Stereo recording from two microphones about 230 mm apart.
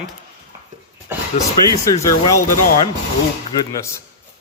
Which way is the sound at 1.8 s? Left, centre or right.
Centre.